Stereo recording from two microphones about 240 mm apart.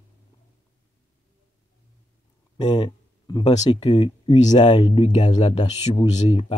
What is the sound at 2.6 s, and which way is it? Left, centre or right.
Speech, left.